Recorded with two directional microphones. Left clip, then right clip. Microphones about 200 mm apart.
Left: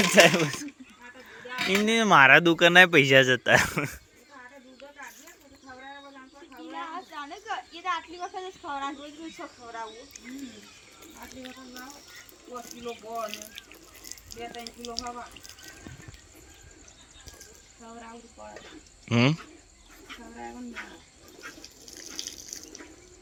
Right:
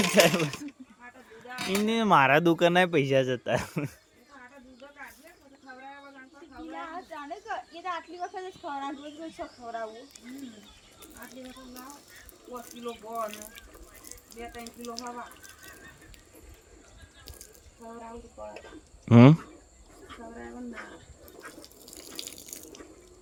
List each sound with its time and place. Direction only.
0.0 s speech: centre (ahead or behind)
6.7 s a sound: 55° right (ahead or behind)
11.3 s speech: 10° right (ahead or behind)
12.8 s speech: 10° right (ahead or behind)
13.2 s water: 45° right (ahead or behind)
14.5 s speech: 45° right (ahead or behind)
19.0 s speech: 45° right (ahead or behind)